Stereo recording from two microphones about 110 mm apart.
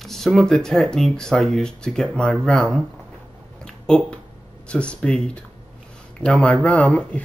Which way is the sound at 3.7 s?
5° left (ahead or behind).